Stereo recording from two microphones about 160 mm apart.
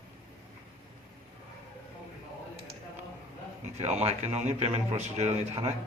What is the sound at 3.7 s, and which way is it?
A man's voice, 40° right (ahead or behind).